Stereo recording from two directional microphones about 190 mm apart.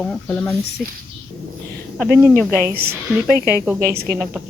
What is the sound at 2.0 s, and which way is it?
Speech, 5° right (ahead or behind).